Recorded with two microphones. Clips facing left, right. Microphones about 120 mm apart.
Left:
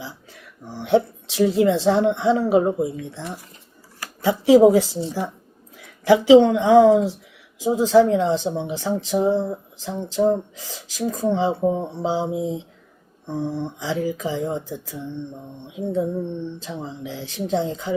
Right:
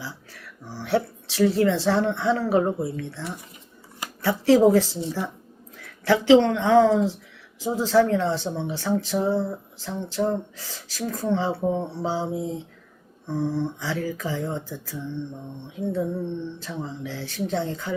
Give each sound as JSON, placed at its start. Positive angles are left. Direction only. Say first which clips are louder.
{"t": 0.0, "sound": "speech", "louder": "left 1 dB", "side_deg": 20}